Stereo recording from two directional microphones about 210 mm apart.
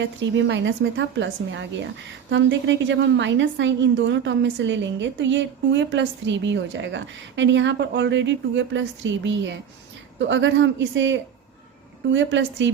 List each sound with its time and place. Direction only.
0.0 s a woman's voice: 60° right (ahead or behind)